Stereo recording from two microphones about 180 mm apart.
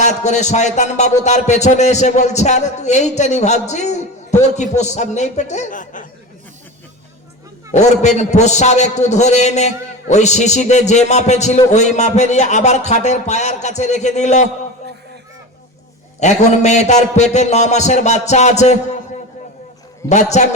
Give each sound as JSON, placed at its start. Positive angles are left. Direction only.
{"t": 0.0, "sound": "a man's voice", "side_deg": 40}
{"t": 7.7, "sound": "a man's voice", "side_deg": 40}
{"t": 16.2, "sound": "a man's voice", "side_deg": 40}
{"t": 20.1, "sound": "a man's voice", "side_deg": 40}